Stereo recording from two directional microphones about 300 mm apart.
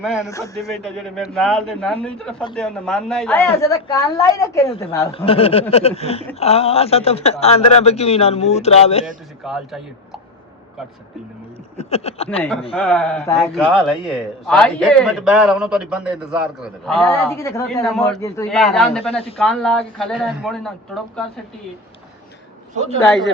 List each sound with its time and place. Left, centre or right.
0.0 s a man's voice: centre
0.3 s a man's voice: centre
9.4 s speech: centre
11.8 s a woman's voice: left
12.7 s a man's voice: centre
23.0 s a man's voice: centre